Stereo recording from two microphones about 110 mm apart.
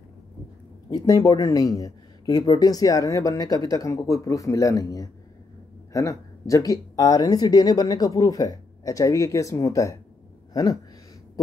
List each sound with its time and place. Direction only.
0.8 s speech: 35° left (ahead or behind)